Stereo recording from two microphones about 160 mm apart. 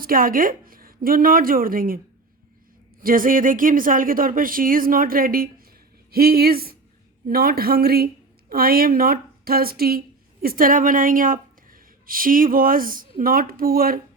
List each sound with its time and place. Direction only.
0.0 s speech: 60° right (ahead or behind)
3.0 s speech: 60° right (ahead or behind)
6.1 s a woman's voice: 75° right (ahead or behind)